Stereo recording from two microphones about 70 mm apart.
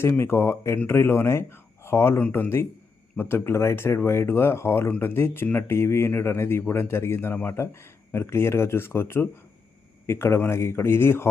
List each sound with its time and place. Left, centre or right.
0.0 s speech: left